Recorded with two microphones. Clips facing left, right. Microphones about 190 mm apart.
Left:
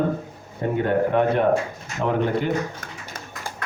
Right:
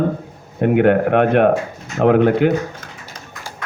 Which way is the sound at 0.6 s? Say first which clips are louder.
Right 7 dB; 75° right (ahead or behind).